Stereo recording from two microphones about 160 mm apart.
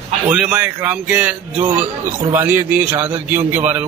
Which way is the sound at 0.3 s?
10° right (ahead or behind).